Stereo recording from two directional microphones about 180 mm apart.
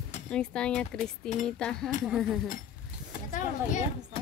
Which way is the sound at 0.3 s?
5° left (ahead or behind).